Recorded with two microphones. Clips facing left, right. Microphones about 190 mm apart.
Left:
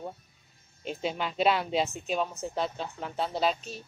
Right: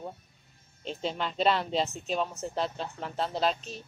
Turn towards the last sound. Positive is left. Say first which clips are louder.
# left 1 dB
turn(degrees=5)  # may be behind; listen again after turning